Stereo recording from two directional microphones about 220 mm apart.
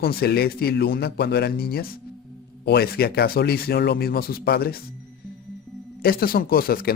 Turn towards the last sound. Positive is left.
turn(degrees=40)  # may be behind; listen again after turning